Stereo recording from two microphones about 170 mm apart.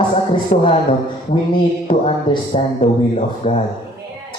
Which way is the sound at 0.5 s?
40° left (ahead or behind).